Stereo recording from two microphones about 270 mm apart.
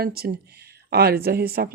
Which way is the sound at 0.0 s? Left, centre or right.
Right.